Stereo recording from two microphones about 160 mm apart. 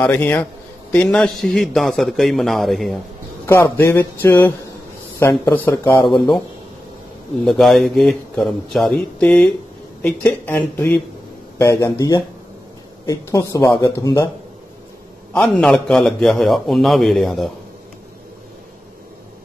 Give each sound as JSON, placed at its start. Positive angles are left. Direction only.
{"t": 0.0, "sound": "a man's voice", "side_deg": 10}
{"t": 3.7, "sound": "speech", "side_deg": 15}
{"t": 5.5, "sound": "speech", "side_deg": 15}
{"t": 6.1, "sound": "a man's voice", "side_deg": 0}
{"t": 7.4, "sound": "a man's voice", "side_deg": 0}
{"t": 15.3, "sound": "a man's voice", "side_deg": 5}